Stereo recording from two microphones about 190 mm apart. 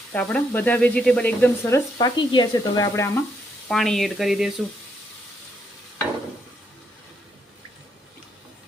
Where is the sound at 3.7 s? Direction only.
Centre (ahead or behind).